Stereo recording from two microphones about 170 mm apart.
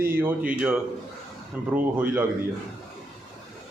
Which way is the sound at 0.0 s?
15° right (ahead or behind).